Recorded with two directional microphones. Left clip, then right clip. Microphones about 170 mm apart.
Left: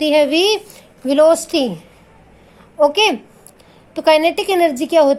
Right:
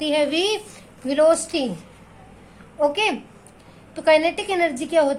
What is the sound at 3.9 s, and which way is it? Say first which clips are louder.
A woman's voice: left 4 dB; 50° left (ahead or behind).